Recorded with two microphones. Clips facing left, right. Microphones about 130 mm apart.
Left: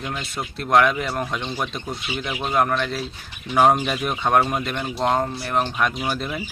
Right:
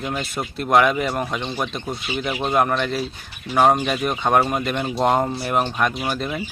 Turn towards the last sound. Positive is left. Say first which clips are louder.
# right 1 dB
turn(degrees=0)  # may be behind; listen again after turning